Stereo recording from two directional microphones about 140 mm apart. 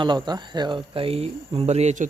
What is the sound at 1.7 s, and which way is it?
Speech, 50° right (ahead or behind).